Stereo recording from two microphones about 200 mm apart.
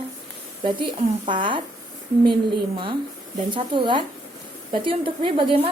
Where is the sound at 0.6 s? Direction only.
25° right (ahead or behind).